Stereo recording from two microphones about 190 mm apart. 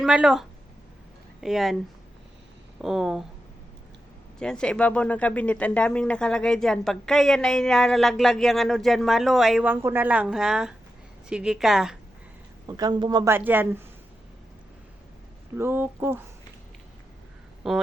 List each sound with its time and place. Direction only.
0.0 s speech: 5° right (ahead or behind)
2.8 s speech: centre (ahead or behind)
4.4 s speech: 5° left (ahead or behind)
12.6 s a woman's voice: 20° right (ahead or behind)
15.5 s a woman's voice: 10° right (ahead or behind)
17.6 s speech: centre (ahead or behind)